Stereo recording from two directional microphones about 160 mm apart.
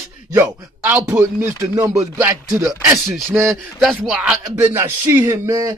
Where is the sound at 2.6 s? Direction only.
Centre (ahead or behind).